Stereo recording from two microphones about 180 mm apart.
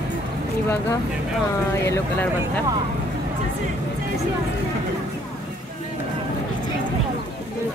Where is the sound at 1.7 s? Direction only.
10° left (ahead or behind).